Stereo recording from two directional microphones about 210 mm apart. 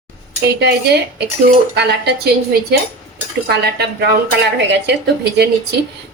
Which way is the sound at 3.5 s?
50° right (ahead or behind).